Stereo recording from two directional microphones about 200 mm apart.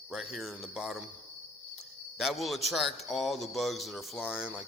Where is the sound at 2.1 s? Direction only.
Centre (ahead or behind).